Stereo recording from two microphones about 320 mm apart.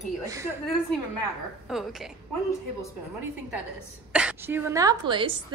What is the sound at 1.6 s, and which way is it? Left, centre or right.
Speech, centre.